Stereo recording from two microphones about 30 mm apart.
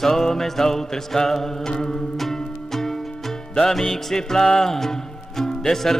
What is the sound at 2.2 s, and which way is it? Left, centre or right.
Music, centre.